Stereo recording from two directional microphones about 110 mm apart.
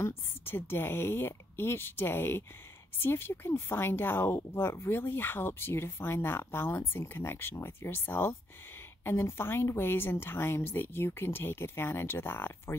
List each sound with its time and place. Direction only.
0.0 s speech: 20° left (ahead or behind)